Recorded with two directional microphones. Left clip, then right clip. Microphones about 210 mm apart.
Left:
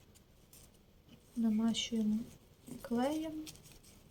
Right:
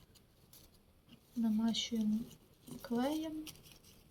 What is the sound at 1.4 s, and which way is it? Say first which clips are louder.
Speech: left 1 dB; 5° left (ahead or behind).